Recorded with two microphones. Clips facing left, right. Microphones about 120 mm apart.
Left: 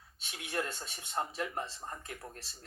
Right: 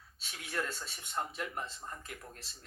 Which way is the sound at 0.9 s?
30° left (ahead or behind).